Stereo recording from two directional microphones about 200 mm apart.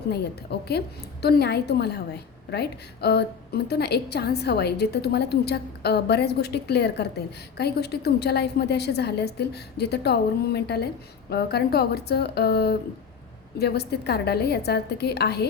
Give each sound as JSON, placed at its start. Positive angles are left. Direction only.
{"t": 0.1, "sound": "a woman's voice", "side_deg": 55}